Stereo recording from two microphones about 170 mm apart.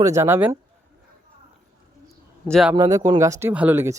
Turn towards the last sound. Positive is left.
turn(degrees=-15)  # may be behind; listen again after turning